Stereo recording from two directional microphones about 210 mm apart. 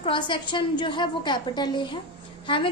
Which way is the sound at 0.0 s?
25° left (ahead or behind).